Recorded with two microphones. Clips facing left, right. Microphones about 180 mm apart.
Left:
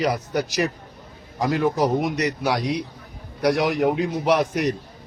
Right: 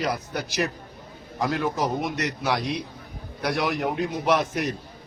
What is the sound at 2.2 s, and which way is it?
Speech, centre (ahead or behind).